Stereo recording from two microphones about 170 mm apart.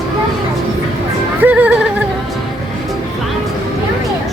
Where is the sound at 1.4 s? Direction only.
10° right (ahead or behind).